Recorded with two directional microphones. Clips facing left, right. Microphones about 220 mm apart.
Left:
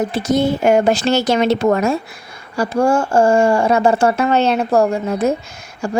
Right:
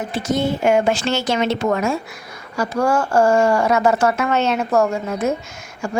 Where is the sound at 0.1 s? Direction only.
40° left (ahead or behind).